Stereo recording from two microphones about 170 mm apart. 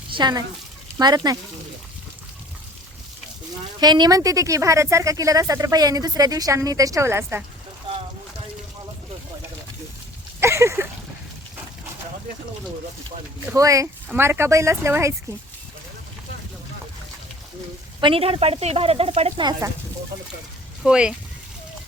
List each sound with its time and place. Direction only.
0.1 s speech: 25° right (ahead or behind)
3.8 s speech: 25° right (ahead or behind)
10.4 s a sound: 15° right (ahead or behind)
13.4 s speech: 15° right (ahead or behind)
18.0 s a woman's voice: 35° right (ahead or behind)
19.5 s speech: 20° right (ahead or behind)
20.8 s speech: 5° right (ahead or behind)